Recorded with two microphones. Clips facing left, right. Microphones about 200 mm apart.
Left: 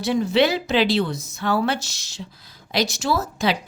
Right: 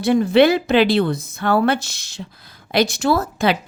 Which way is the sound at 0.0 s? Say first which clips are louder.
Right 5 dB; 55° right (ahead or behind).